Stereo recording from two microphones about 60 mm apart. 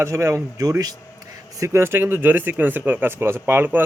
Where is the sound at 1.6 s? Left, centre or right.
Right.